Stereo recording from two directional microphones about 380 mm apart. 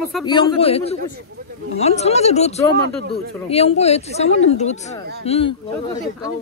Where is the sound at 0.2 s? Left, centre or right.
Centre.